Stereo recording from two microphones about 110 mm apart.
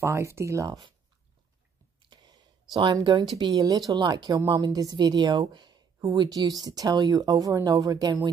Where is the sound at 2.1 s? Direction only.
40° right (ahead or behind).